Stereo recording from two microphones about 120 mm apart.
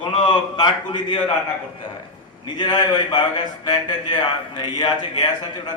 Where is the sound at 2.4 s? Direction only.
40° left (ahead or behind).